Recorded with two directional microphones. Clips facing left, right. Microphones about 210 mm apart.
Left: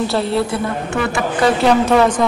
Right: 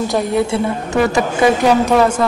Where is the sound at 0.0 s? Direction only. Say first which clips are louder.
Right 1 dB; 15° right (ahead or behind).